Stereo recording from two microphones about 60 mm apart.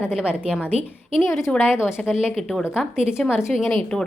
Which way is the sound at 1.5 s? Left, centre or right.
Left.